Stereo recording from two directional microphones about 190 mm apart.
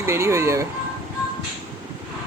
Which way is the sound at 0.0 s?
15° right (ahead or behind).